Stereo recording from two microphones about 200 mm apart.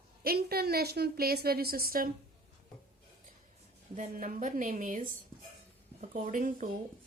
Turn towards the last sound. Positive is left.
turn(degrees=-40)  # may be behind; listen again after turning